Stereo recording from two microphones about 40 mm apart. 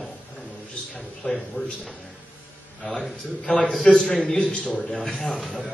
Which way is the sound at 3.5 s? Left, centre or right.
Left.